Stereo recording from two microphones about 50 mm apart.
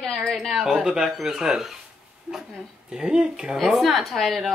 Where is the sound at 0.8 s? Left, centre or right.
Centre.